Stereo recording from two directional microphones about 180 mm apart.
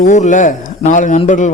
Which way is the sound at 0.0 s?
45° left (ahead or behind).